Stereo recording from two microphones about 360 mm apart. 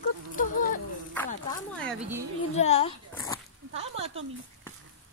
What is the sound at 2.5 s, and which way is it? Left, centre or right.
Speech, centre.